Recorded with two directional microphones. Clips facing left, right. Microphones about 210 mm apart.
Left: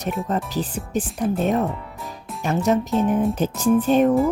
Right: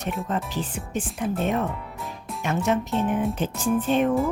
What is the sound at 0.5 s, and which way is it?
Speech, 35° left (ahead or behind).